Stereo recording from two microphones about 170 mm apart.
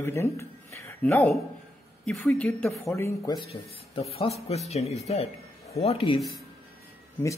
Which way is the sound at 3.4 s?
35° left (ahead or behind).